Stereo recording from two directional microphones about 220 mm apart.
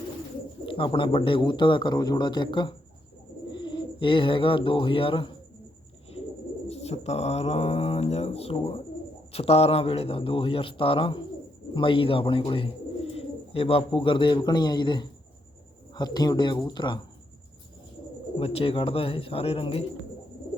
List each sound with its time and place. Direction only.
0.6 s speech: 25° left (ahead or behind)
6.7 s speech: 30° left (ahead or behind)
18.3 s speech: 25° left (ahead or behind)